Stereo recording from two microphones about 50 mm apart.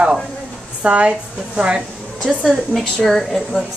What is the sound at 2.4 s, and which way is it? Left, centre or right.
Speech, centre.